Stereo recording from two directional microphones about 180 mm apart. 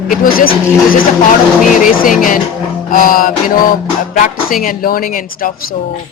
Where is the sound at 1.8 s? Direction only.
50° left (ahead or behind).